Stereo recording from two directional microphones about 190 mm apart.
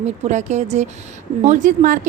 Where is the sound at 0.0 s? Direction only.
40° right (ahead or behind).